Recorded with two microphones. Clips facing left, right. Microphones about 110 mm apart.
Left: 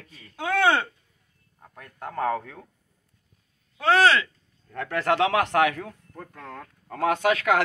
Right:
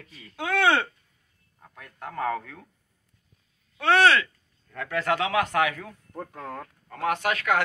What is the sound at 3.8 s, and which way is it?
Speech, 30° left (ahead or behind).